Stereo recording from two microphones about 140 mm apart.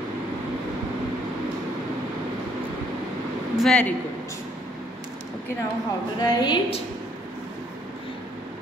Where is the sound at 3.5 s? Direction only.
5° left (ahead or behind).